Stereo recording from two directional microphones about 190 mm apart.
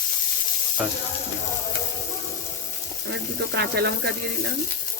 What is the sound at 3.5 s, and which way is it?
Sizzle, 60° right (ahead or behind).